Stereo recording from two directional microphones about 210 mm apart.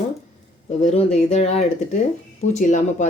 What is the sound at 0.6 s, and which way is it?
Speech, 30° left (ahead or behind).